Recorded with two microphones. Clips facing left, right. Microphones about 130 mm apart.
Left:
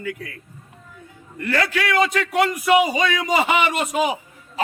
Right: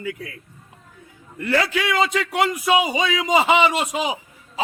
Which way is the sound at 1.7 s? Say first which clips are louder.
Left 1 dB; 25° right (ahead or behind).